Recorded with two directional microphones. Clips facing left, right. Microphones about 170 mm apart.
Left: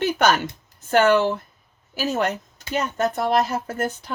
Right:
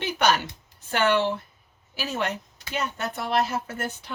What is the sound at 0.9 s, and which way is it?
Speech, 45° left (ahead or behind).